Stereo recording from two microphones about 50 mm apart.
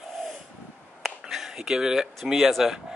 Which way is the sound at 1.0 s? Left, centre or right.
Centre.